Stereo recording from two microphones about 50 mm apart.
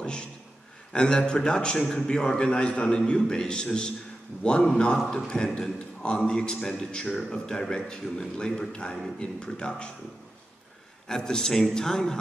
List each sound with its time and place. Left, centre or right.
0.0 s a sound: centre
0.9 s a man's voice: centre
11.1 s a man's voice: centre